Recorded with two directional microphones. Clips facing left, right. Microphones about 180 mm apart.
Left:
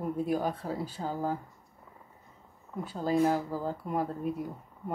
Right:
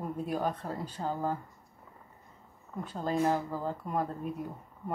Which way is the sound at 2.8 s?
10° left (ahead or behind).